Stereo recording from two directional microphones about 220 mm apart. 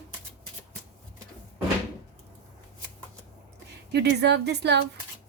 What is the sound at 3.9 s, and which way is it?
Speech, 50° right (ahead or behind).